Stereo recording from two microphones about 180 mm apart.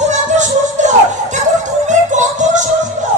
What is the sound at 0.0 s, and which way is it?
Music, 40° right (ahead or behind).